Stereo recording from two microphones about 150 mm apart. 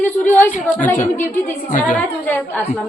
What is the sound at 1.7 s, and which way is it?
Speech, 60° left (ahead or behind).